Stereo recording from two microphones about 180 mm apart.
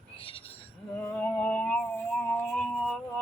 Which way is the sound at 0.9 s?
10° left (ahead or behind).